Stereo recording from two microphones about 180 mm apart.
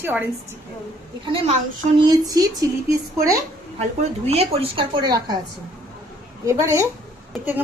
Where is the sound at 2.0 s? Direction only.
20° right (ahead or behind).